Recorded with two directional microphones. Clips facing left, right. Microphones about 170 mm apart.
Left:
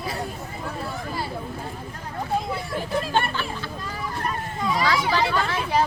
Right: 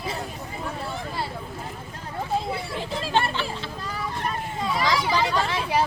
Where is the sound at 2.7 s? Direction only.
25° right (ahead or behind).